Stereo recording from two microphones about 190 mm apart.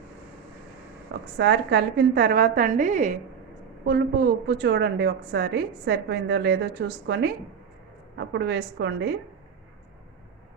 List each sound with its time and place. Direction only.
1.4 s a woman's voice: 65° right (ahead or behind); by 3.1 s 40° right (ahead or behind)
3.8 s a woman's voice: 55° right (ahead or behind)